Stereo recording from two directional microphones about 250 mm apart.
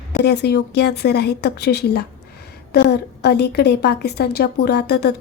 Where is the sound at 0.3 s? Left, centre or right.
Left.